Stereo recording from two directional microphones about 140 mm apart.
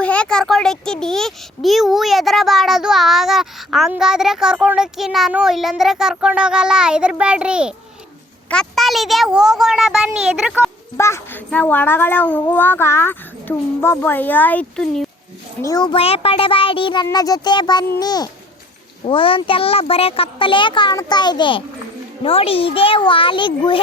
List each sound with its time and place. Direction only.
0.0 s a child's voice: 10° left (ahead or behind); by 7.8 s 5° right (ahead or behind)
8.4 s a child's voice: 5° left (ahead or behind)
10.9 s a child's voice: 20° left (ahead or behind)
15.6 s a child's voice: 25° left (ahead or behind)
15.9 s a child's voice: 45° left (ahead or behind)
19.0 s a child's voice: 40° left (ahead or behind)